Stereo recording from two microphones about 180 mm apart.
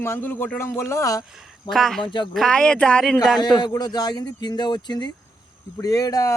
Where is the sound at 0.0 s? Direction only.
10° left (ahead or behind).